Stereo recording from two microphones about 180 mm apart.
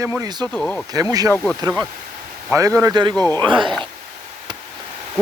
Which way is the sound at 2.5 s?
20° right (ahead or behind).